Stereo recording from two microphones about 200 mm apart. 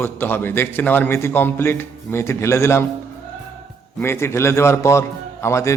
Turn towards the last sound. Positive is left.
turn(degrees=15)  # may be behind; listen again after turning